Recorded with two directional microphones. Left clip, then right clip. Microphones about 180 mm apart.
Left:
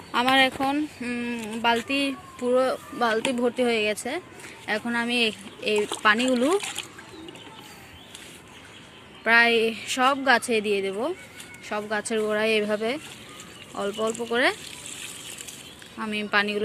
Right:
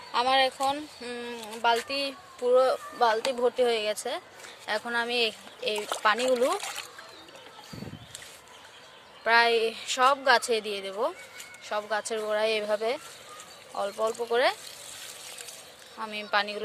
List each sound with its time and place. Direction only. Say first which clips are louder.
0.1 s speech: left 3 dB; centre (ahead or behind)
9.2 s speech: left 3 dB; 10° right (ahead or behind)
14.1 s speech: left 1 dB; centre (ahead or behind)
16.0 s speech: left 4 dB; 10° right (ahead or behind)